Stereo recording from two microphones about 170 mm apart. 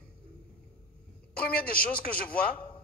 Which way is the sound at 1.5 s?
60° left (ahead or behind).